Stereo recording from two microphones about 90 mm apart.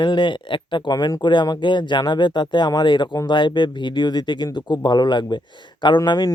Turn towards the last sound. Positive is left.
turn(degrees=50)  # may be behind; listen again after turning